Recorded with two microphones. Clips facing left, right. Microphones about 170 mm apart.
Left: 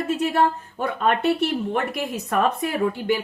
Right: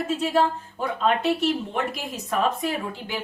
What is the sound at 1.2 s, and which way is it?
Speech, 60° left (ahead or behind).